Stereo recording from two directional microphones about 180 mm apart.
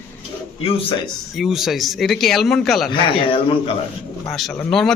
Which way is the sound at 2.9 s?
30° left (ahead or behind).